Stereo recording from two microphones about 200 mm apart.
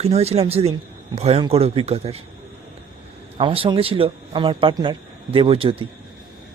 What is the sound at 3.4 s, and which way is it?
A man's voice, 25° right (ahead or behind).